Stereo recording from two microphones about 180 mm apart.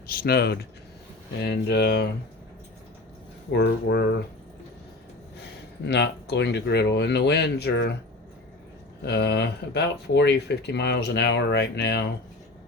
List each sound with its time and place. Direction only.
0.1 s speech: 55° left (ahead or behind)
3.5 s speech: 70° left (ahead or behind)
5.8 s speech: 65° left (ahead or behind)
9.0 s speech: 65° left (ahead or behind)